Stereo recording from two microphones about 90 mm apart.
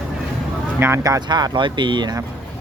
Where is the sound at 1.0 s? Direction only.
45° right (ahead or behind).